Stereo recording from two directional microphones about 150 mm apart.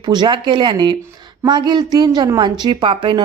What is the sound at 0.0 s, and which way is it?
A woman's voice, 30° right (ahead or behind).